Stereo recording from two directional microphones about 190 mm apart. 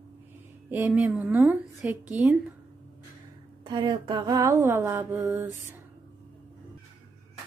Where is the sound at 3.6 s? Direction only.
25° right (ahead or behind).